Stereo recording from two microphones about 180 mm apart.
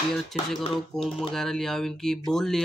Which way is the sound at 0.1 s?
Centre (ahead or behind).